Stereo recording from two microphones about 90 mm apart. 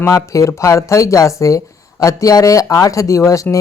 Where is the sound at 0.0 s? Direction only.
35° left (ahead or behind).